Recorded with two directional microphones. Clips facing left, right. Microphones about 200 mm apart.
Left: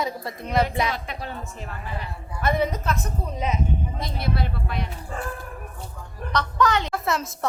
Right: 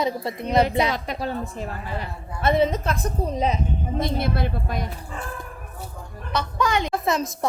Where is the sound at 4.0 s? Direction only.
50° right (ahead or behind).